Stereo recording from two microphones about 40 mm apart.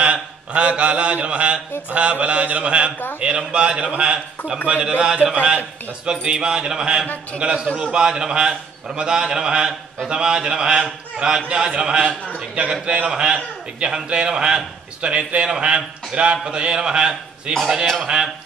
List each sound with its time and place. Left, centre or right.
0.0 s mantra: right
1.9 s a man's voice: right
18.0 s a sound: centre